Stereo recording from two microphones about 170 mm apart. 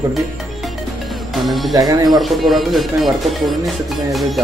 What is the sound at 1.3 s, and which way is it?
Speech, centre (ahead or behind).